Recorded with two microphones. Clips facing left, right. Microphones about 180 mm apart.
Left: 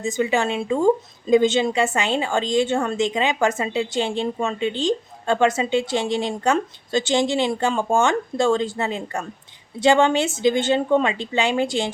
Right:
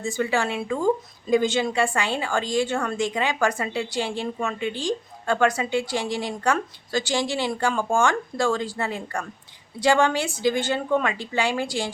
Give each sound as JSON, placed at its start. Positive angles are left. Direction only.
{"t": 0.0, "sound": "speech", "side_deg": 20}